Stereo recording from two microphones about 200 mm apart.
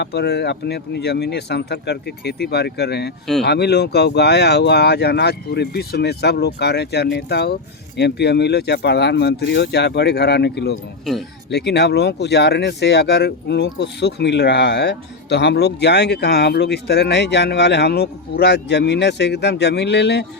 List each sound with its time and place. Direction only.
0.0 s speech: 55° left (ahead or behind)